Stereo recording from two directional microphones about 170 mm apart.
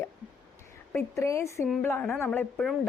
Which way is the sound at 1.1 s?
15° left (ahead or behind).